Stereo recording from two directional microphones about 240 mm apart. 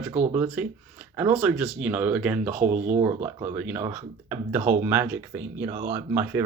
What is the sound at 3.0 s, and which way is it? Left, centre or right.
Speech, centre.